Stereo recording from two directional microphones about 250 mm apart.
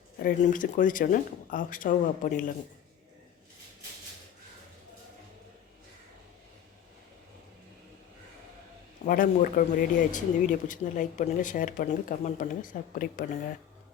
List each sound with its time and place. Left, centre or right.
0.2 s speech: left
9.0 s speech: left